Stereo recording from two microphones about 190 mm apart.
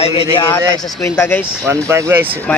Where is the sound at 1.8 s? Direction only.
15° right (ahead or behind).